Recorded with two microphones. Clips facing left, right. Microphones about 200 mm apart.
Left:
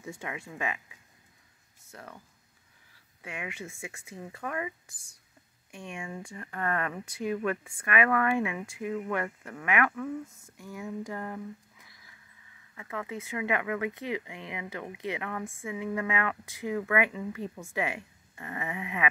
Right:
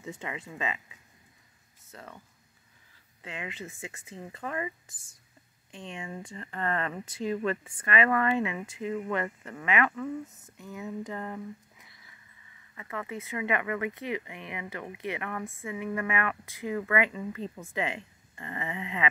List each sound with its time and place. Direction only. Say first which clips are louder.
0.0 s speech: right 1 dB; 20° right (ahead or behind)
1.9 s speech: even; 10° left (ahead or behind)
12.7 s speech: even; 15° left (ahead or behind)